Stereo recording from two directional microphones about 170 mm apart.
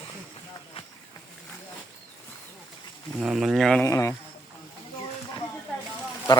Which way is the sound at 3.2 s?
5° right (ahead or behind).